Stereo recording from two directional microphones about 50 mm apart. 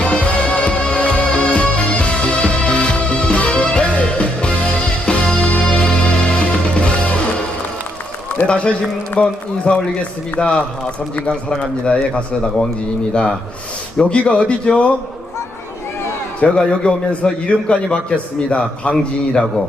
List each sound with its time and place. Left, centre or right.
0.0 s music: left
8.4 s a man's voice: left
14.0 s a man's voice: left
16.6 s a man's voice: centre